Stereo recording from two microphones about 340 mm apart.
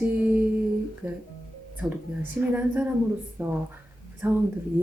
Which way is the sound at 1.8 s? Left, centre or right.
Centre.